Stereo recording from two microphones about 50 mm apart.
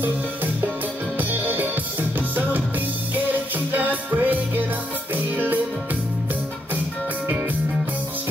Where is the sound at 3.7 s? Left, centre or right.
Right.